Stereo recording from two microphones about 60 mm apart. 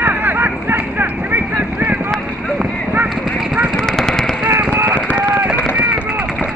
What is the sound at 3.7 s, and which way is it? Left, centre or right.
Vehicle, centre.